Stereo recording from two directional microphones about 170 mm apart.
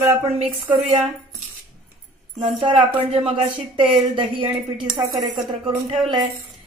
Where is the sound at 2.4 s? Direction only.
40° right (ahead or behind); by 5.3 s 25° right (ahead or behind).